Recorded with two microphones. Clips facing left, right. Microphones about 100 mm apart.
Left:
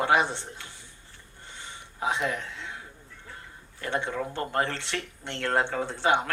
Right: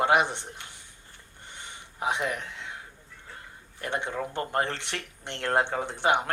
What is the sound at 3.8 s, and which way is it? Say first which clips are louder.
Speech: left 1 dB; 20° right (ahead or behind).